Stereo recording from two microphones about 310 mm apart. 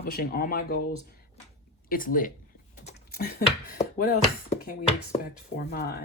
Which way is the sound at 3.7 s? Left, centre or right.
Left.